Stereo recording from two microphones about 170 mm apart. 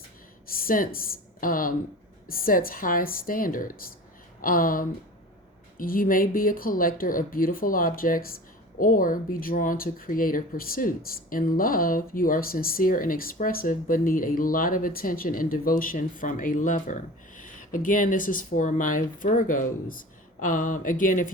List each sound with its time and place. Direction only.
0.4 s a woman's voice: 55° left (ahead or behind)